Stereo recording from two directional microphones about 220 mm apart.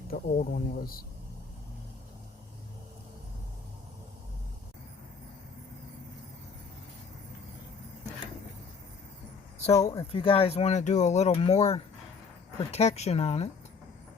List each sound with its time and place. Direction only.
0.1 s speech: 40° left (ahead or behind)
9.8 s speech: 20° left (ahead or behind)